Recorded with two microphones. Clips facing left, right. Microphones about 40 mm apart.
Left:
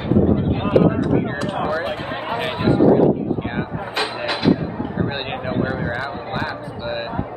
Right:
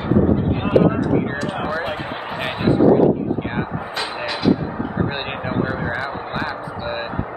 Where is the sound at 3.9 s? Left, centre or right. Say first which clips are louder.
Left 3 dB; left.